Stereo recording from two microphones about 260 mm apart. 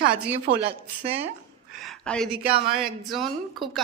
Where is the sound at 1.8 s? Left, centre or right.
Centre.